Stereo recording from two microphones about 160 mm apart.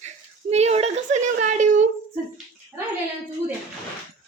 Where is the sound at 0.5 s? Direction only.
40° right (ahead or behind).